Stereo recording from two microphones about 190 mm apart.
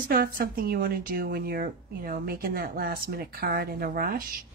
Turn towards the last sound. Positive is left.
turn(degrees=-50)  # may be behind; listen again after turning